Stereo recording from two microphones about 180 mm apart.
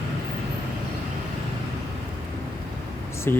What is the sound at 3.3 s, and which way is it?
Speech, 10° left (ahead or behind).